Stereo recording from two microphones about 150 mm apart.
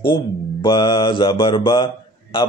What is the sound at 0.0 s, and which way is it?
Speech, 35° left (ahead or behind).